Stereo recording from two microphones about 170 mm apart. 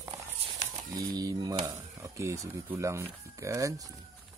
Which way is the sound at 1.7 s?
15° right (ahead or behind).